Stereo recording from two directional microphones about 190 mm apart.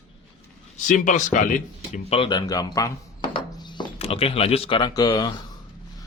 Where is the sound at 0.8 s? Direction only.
40° left (ahead or behind).